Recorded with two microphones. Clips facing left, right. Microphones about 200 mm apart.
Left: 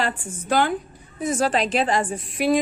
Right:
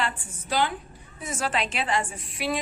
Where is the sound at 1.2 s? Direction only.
35° left (ahead or behind).